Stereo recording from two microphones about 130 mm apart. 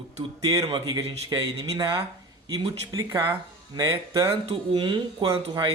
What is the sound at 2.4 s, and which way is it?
Speech, 30° right (ahead or behind).